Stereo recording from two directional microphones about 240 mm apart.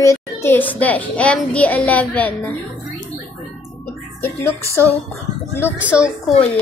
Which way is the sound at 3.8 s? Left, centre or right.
Centre.